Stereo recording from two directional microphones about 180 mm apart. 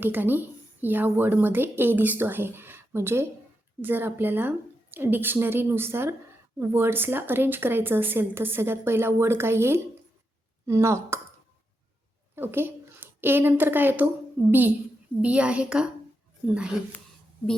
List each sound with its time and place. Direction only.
0.0 s a woman's voice: 10° right (ahead or behind)
12.4 s a woman's voice: 10° right (ahead or behind)